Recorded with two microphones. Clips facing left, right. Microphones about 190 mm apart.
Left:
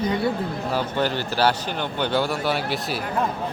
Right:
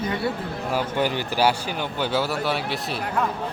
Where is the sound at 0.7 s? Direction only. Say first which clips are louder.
Right 1 dB; 10° right (ahead or behind).